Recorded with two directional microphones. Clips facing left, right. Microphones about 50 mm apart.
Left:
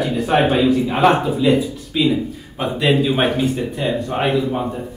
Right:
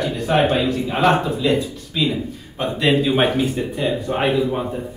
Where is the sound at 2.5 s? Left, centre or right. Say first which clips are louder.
Left 1 dB; centre.